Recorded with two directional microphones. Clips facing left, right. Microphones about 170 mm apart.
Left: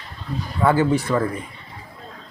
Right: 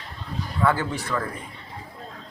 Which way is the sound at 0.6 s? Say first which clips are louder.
Left 6 dB; 20° left (ahead or behind).